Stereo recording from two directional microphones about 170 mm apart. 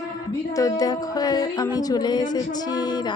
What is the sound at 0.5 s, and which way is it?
Music, 20° left (ahead or behind).